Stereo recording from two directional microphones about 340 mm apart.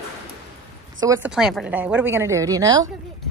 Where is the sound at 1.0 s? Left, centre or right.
Centre.